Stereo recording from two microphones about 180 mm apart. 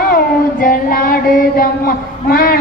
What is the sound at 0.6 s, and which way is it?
A man's voice, 55° left (ahead or behind).